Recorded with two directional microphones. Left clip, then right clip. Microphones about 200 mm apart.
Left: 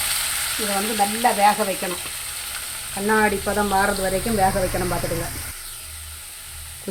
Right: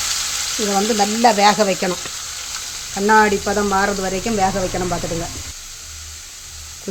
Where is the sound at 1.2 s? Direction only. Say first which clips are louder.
Right 5 dB; 60° right (ahead or behind).